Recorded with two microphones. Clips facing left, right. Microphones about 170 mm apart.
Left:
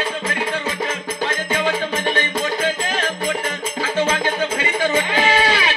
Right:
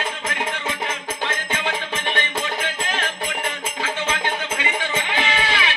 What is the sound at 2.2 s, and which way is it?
Music, 40° left (ahead or behind).